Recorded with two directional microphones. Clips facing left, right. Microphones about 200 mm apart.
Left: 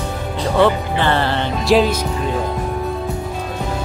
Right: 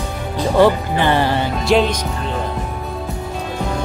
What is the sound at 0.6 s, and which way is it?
Speech, 15° right (ahead or behind).